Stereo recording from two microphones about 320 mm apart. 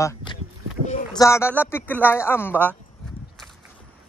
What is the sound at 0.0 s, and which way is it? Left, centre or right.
Speech, centre.